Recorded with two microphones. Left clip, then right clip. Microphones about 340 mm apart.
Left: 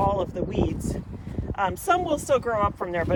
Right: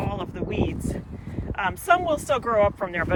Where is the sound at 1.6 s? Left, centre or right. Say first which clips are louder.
Right 2 dB; centre.